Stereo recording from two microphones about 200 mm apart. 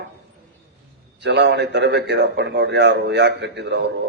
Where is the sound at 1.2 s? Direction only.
60° right (ahead or behind).